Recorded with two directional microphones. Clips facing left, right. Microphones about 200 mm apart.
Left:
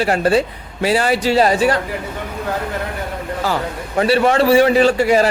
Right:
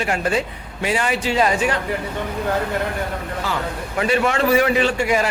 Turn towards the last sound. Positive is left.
turn(degrees=35)  # may be behind; listen again after turning